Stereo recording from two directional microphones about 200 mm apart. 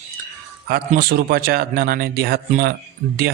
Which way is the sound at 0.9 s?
50° right (ahead or behind).